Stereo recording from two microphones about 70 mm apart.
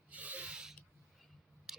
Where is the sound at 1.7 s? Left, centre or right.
Centre.